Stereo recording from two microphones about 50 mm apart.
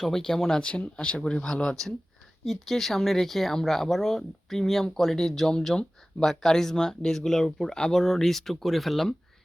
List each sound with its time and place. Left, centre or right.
0.0 s speech: centre
0.8 s speech: left
2.4 s speech: centre